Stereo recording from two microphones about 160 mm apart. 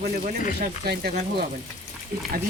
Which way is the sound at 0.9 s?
80° right.